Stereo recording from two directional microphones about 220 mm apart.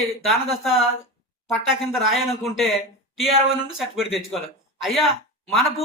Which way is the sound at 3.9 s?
Centre (ahead or behind).